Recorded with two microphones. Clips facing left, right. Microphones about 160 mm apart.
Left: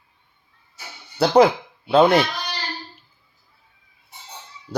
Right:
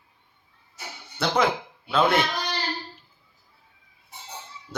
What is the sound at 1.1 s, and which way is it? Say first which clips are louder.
Speech: left 9 dB; 40° left (ahead or behind).